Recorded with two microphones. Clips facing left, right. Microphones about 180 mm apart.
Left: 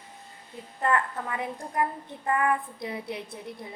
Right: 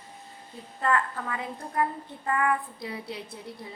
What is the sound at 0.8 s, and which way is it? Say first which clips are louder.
A woman's voice: even; 20° left (ahead or behind).